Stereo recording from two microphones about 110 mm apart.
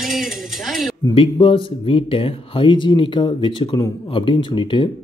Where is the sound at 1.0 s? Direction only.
50° left (ahead or behind).